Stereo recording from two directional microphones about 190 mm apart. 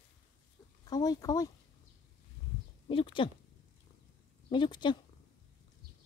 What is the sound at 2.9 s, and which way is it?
Speech, 25° left (ahead or behind).